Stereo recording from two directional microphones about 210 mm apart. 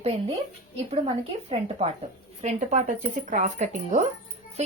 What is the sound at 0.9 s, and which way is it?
A woman's voice, 30° right (ahead or behind).